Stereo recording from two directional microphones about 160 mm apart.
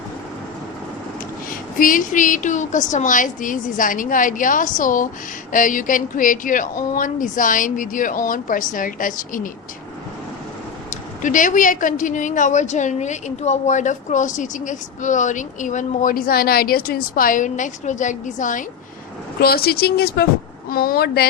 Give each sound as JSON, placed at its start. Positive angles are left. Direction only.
{"t": 1.5, "sound": "speech", "side_deg": 60}
{"t": 11.2, "sound": "a woman's voice", "side_deg": 55}
{"t": 19.4, "sound": "speech", "side_deg": 75}
{"t": 20.7, "sound": "speech", "side_deg": 70}